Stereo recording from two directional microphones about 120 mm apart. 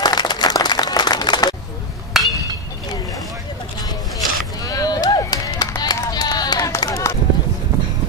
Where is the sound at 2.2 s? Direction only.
Centre (ahead or behind).